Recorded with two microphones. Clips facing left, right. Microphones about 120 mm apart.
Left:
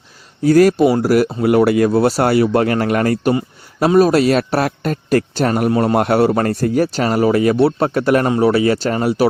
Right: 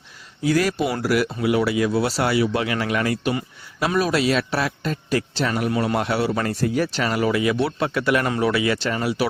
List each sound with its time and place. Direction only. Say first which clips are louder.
0.4 s a man's voice: left 10 dB; 45° left (ahead or behind)